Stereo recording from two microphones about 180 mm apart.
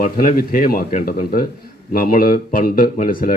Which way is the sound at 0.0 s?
50° left (ahead or behind).